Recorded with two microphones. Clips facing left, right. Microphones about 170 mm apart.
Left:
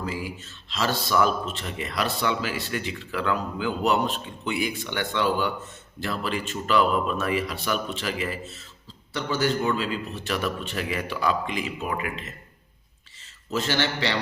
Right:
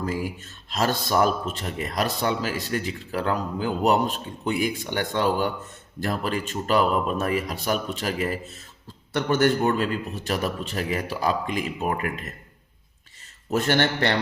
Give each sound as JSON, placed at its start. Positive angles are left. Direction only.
{"t": 0.0, "sound": "a man's voice", "side_deg": -45}
{"t": 9.1, "sound": "a man's voice", "side_deg": -55}
{"t": 13.5, "sound": "a man's voice", "side_deg": -55}